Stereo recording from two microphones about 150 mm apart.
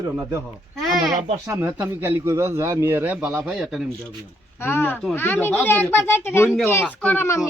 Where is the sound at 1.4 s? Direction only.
20° right (ahead or behind); by 3.9 s centre (ahead or behind).